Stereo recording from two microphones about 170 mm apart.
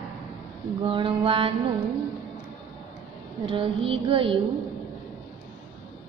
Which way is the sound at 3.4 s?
35° right (ahead or behind).